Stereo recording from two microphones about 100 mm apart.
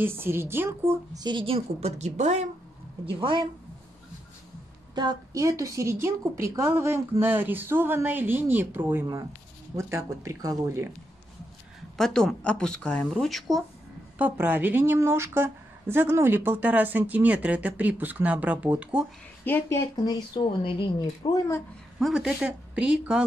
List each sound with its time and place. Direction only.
0.0 s a woman's voice: 25° right (ahead or behind)
1.1 s a woman's voice: 45° right (ahead or behind)
1.4 s a woman's voice: 80° right
3.1 s speech: 55° right (ahead or behind)
4.9 s a woman's voice: 40° right (ahead or behind)
12.0 s speech: 5° left (ahead or behind)
14.1 s a woman's voice: 15° right (ahead or behind)
19.4 s speech: 20° left (ahead or behind)
20.1 s speech: 55° left (ahead or behind)
22.0 s a woman's voice: 10° right (ahead or behind)